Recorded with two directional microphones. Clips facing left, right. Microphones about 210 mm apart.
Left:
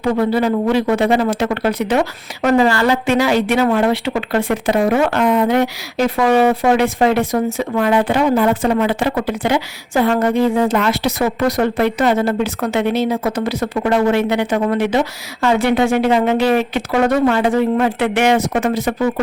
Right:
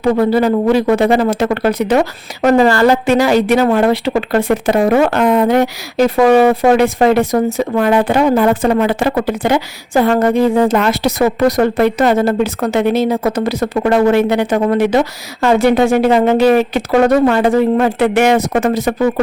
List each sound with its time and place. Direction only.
0.0 s speech: 40° right (ahead or behind)